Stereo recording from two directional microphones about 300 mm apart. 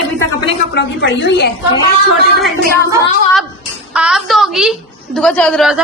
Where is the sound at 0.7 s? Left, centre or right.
Left.